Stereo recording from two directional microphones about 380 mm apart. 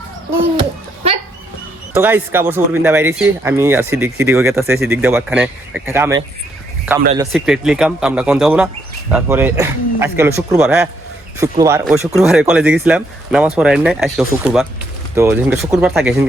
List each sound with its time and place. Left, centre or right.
2.0 s speech: centre